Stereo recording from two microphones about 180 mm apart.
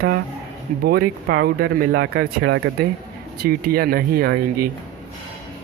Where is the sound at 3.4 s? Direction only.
55° right (ahead or behind).